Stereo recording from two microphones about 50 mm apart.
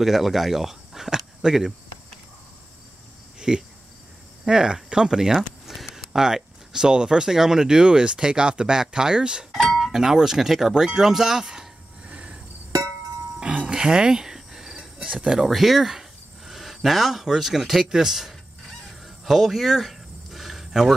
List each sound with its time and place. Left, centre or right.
0.0 s speech: centre
3.3 s cricket: centre
4.5 s speech: centre
12.1 s cricket: right
13.4 s a sound: right
15.0 s speech: centre
18.9 s a sound: centre